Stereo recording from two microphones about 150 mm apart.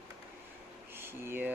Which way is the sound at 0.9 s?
15° right (ahead or behind).